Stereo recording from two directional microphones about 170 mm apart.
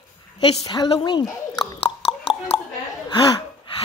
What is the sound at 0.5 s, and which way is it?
A woman's voice, 25° left (ahead or behind).